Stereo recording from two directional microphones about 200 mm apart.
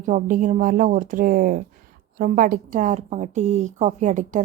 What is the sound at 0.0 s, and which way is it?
A woman's voice, 40° right (ahead or behind).